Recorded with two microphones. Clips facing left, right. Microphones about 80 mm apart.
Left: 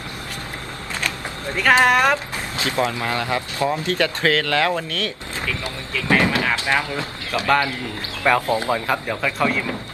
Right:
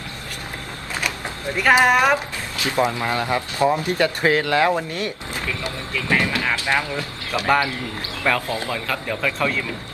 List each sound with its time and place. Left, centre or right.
1.6 s speech: centre
2.6 s a man's voice: right
6.1 s speech: left
7.3 s a man's voice: centre
8.2 s speech: centre